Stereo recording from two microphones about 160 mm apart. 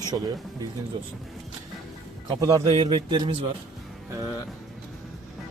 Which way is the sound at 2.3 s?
25° right (ahead or behind).